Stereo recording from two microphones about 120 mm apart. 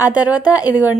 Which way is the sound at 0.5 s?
15° right (ahead or behind).